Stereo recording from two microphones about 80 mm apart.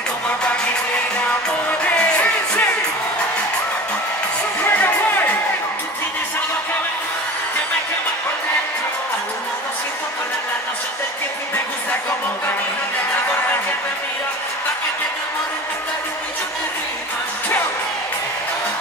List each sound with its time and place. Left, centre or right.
2.0 s music: centre
4.6 s music: left